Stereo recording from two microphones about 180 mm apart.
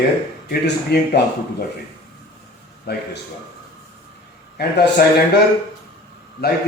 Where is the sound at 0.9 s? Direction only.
65° left (ahead or behind).